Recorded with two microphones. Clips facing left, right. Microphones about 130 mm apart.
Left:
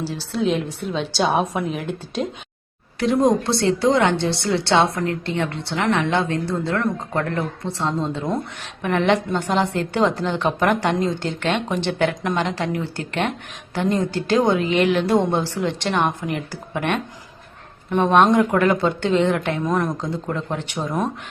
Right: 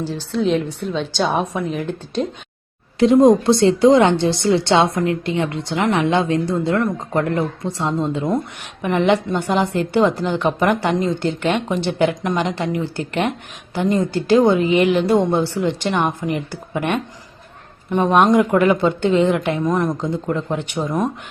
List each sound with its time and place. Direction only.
0.0 s a woman's voice: 5° left (ahead or behind)
3.0 s a woman's voice: 20° right (ahead or behind); by 21.1 s centre (ahead or behind)